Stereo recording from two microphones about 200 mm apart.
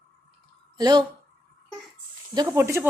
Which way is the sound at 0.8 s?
20° right (ahead or behind).